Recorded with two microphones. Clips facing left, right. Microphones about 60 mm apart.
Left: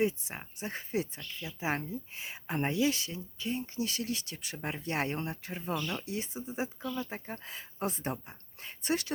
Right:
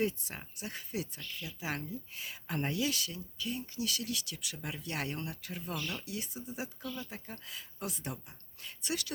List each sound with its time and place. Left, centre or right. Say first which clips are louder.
0.0 s speech: left 3 dB; left